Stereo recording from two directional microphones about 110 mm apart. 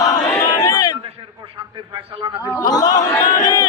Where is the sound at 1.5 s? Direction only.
45° right (ahead or behind).